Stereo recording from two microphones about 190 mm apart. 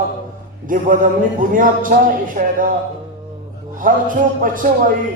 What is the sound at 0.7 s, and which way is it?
A man's voice, 45° right (ahead or behind).